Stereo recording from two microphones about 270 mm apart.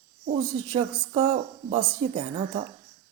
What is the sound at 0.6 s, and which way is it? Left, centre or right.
Speech, centre.